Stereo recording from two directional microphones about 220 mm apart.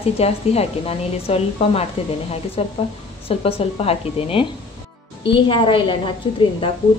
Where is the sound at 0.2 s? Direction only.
30° left (ahead or behind).